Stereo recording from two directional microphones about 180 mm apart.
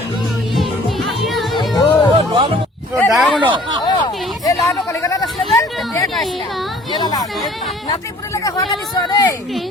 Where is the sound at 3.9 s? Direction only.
25° left (ahead or behind).